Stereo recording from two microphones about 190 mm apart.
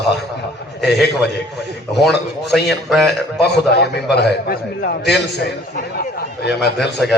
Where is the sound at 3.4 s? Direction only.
60° left (ahead or behind).